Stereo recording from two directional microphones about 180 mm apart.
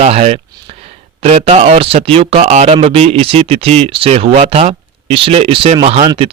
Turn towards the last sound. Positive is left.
turn(degrees=-30)  # may be behind; listen again after turning